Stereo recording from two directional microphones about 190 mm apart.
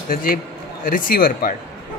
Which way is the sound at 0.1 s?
50° left (ahead or behind).